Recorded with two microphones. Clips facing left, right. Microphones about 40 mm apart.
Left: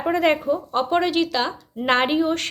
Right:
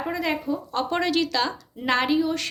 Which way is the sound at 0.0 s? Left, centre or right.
Left.